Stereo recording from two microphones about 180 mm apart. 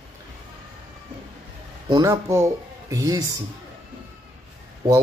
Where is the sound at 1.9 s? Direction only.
15° right (ahead or behind).